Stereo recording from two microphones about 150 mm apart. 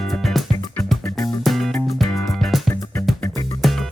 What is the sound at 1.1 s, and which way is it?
Music, 20° left (ahead or behind).